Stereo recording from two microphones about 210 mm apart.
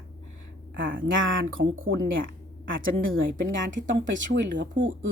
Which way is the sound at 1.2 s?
65° right (ahead or behind).